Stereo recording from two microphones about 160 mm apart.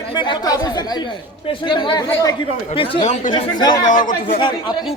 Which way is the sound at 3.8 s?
55° left (ahead or behind).